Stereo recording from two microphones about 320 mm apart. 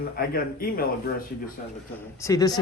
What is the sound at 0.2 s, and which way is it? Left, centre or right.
Speech, left.